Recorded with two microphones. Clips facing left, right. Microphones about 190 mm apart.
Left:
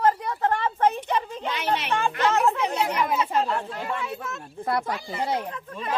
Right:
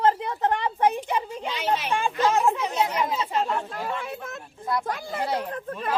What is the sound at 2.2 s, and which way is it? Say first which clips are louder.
Speech: even; 15° right (ahead or behind).